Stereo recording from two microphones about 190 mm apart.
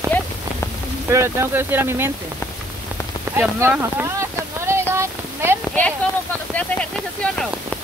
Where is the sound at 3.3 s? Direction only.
10° right (ahead or behind).